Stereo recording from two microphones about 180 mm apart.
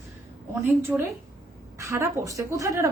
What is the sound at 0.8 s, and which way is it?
A woman's voice, 10° right (ahead or behind).